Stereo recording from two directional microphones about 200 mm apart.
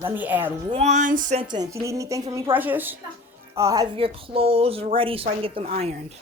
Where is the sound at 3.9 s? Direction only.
25° right (ahead or behind).